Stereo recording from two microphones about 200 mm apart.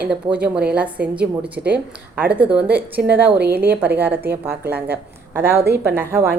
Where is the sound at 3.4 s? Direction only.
55° right (ahead or behind).